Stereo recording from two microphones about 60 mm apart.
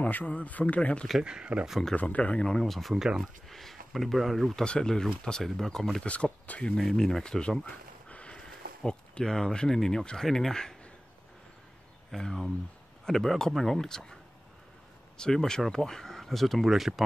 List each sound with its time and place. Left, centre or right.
0.0 s speech: left
1.2 s speech: centre
2.0 s speech: left; by 3.3 s centre
3.4 s speech: centre
4.6 s speech: centre
6.1 s speech: left
6.8 s speech: centre
7.6 s a sound: left
8.8 s speech: centre
12.1 s speech: centre
15.1 s speech: centre